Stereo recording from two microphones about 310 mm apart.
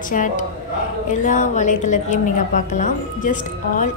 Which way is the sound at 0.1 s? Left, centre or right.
Left.